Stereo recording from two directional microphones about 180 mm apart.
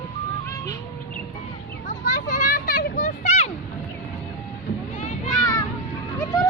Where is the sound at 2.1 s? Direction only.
45° left (ahead or behind).